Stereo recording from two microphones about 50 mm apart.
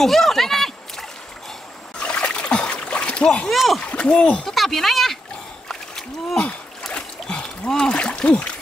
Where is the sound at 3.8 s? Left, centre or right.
Left.